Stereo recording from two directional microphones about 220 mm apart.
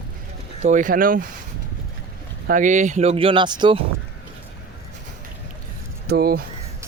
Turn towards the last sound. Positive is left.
turn(degrees=-45)  # may be behind; listen again after turning